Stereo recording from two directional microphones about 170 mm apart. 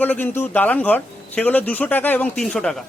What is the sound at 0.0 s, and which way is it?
Speech, 10° left (ahead or behind).